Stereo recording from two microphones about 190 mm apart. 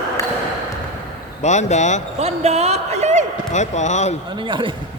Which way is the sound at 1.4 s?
35° left (ahead or behind).